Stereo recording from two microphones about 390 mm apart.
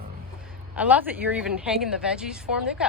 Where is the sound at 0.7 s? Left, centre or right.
Centre.